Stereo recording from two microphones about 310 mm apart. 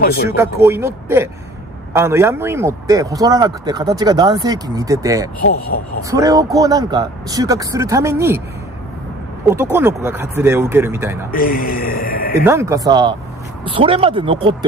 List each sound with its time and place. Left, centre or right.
0.0 s speech: left
0.4 s speech: centre
5.4 s speech: left
6.0 s speech: centre
9.5 s speech: centre
11.3 s a man's voice: left
12.4 s speech: centre